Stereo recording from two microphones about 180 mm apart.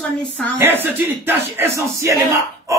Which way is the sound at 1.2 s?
10° right (ahead or behind).